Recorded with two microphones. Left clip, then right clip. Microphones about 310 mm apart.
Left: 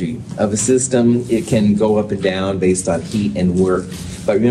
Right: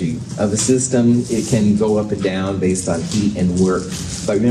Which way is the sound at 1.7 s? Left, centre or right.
Left.